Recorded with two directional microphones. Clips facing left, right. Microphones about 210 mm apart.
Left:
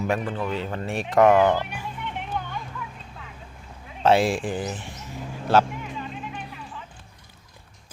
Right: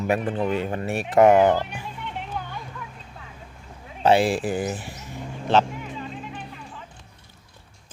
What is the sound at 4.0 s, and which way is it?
Speech, centre (ahead or behind).